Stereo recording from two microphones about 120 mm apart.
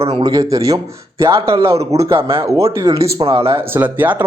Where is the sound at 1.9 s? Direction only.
25° right (ahead or behind).